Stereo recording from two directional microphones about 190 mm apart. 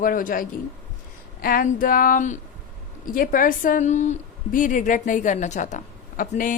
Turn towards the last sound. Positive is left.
turn(degrees=45)  # may be behind; listen again after turning